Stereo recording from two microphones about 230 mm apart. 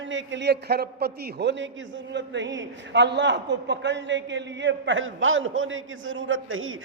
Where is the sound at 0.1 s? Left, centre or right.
Right.